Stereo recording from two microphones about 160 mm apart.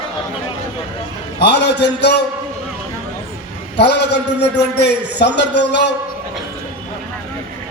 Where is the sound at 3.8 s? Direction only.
90° left.